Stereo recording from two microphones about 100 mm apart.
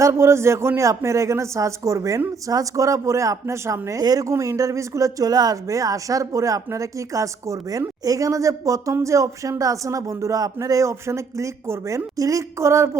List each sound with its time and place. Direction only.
0.0 s speech: 25° right (ahead or behind)